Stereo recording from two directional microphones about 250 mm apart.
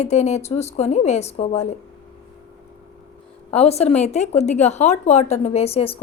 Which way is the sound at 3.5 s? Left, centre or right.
Left.